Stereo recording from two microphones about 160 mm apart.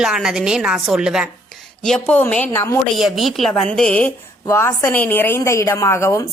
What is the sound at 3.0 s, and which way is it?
A woman's voice, centre (ahead or behind).